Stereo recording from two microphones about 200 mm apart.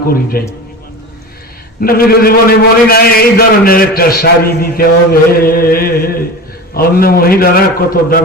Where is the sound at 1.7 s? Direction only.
45° left (ahead or behind).